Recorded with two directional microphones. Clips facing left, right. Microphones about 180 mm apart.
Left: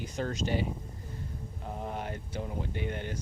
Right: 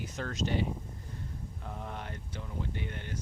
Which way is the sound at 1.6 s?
30° left (ahead or behind).